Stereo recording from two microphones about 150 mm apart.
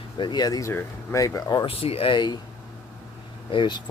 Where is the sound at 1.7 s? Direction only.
40° left (ahead or behind).